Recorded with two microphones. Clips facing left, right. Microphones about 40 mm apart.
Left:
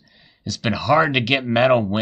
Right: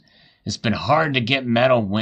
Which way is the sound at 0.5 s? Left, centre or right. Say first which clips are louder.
Even; centre.